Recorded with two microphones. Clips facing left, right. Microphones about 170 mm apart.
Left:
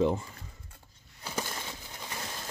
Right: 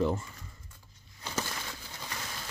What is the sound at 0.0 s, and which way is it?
Coin, 15° left (ahead or behind).